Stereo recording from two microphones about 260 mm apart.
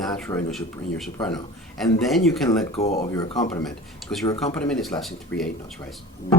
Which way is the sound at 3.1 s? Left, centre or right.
Centre.